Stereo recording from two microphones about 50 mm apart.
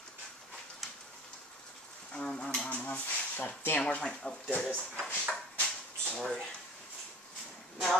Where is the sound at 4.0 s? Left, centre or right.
Centre.